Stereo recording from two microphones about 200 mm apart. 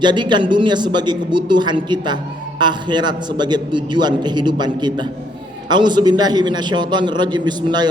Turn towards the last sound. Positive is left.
turn(degrees=-20)  # may be behind; listen again after turning